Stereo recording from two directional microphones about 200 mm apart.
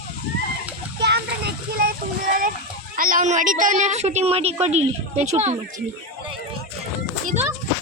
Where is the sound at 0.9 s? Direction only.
55° right (ahead or behind).